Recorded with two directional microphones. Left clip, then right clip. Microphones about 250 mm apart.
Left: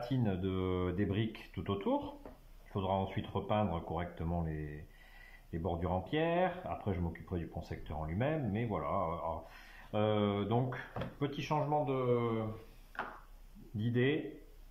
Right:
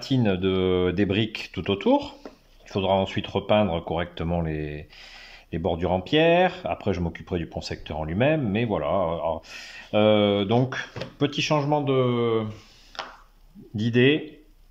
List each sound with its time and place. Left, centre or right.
0.1 s speech: right
13.7 s speech: right